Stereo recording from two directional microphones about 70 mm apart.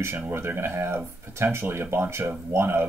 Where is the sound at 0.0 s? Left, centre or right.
Right.